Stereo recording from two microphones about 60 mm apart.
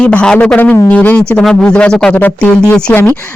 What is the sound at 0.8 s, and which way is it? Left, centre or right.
Speech, left.